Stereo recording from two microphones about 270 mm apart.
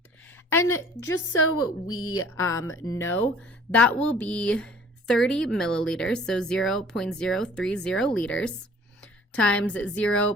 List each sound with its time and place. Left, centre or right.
0.5 s a woman's voice: centre
1.4 s a woman's voice: left
2.3 s a woman's voice: centre